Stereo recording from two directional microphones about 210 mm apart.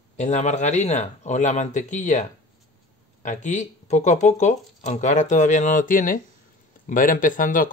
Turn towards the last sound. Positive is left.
turn(degrees=40)  # may be behind; listen again after turning